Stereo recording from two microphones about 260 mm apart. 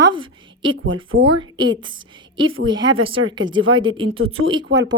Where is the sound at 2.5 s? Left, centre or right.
Right.